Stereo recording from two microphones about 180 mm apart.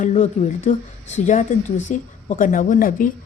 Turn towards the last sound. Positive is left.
turn(degrees=50)  # may be behind; listen again after turning